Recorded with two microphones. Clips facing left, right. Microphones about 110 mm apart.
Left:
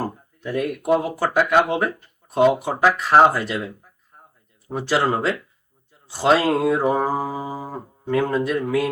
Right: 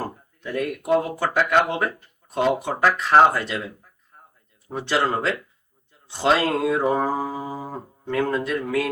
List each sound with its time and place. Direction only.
0.0 s speech: 5° left (ahead or behind)
4.7 s speech: 5° left (ahead or behind)